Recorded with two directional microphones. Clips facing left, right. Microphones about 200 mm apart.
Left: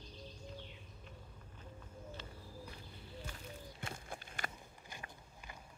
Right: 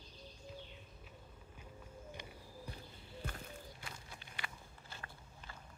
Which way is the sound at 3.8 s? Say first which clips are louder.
Left 6 dB; 50° left (ahead or behind).